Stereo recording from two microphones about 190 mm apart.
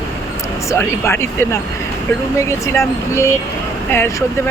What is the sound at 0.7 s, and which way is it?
Speech, 15° left (ahead or behind).